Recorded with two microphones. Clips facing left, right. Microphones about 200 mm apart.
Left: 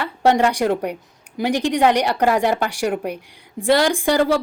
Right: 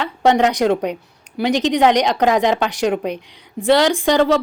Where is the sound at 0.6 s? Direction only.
75° right (ahead or behind).